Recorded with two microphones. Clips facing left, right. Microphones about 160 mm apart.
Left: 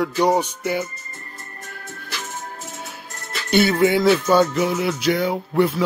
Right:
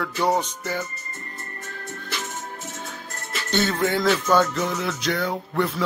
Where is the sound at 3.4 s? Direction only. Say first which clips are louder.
Left 6 dB; 10° left (ahead or behind).